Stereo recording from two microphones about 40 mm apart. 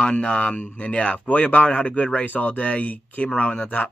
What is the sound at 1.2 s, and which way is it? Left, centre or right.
Speech, left.